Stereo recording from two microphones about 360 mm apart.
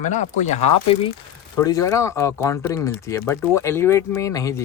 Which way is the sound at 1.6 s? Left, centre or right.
Centre.